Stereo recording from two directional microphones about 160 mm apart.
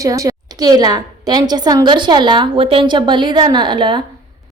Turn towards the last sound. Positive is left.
turn(degrees=-30)  # may be behind; listen again after turning